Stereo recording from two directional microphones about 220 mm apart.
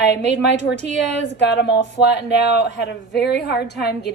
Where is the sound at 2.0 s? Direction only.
50° left (ahead or behind).